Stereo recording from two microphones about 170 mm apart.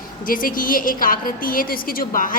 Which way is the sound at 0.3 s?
55° left (ahead or behind).